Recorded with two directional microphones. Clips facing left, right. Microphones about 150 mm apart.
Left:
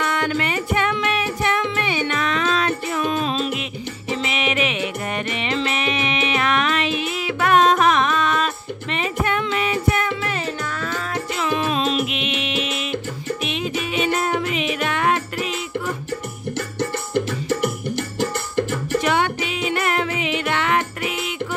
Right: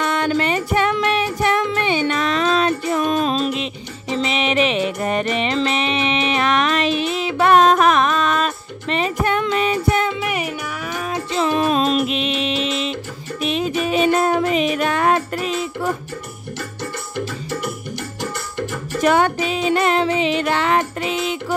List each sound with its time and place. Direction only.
0.0 s music: 30° right (ahead or behind)
7.6 s music: 45° right (ahead or behind)
10.2 s music: 15° right (ahead or behind)
11.3 s music: 35° right (ahead or behind)
18.9 s music: 45° right (ahead or behind)